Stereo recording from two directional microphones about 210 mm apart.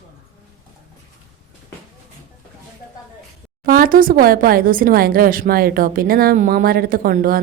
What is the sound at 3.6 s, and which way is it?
Speech, 40° right (ahead or behind).